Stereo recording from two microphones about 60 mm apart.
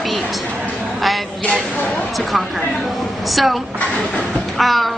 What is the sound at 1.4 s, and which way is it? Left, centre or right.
Speech, left.